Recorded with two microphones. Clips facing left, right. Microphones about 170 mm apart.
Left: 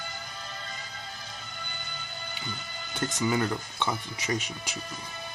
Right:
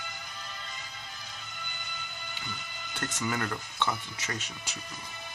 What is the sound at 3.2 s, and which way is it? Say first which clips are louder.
Speech: left 5 dB; 20° left (ahead or behind).